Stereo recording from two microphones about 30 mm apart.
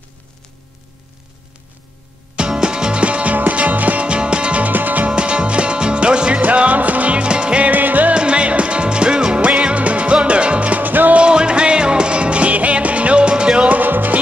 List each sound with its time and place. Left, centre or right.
2.6 s music: right
3.0 s music: right
4.0 s music: right
4.6 s music: right
5.0 s music: right
6.4 s music: right
7.2 s music: right
7.6 s music: right
8.1 s music: right
9.8 s music: right
10.8 s music: right
11.1 s music: right
12.5 s music: right
13.7 s music: right